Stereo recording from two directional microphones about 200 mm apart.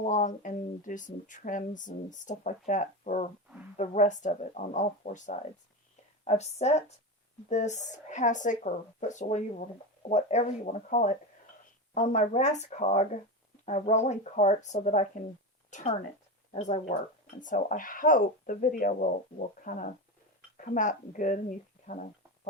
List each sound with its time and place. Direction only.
0.0 s a woman's voice: 35° left (ahead or behind)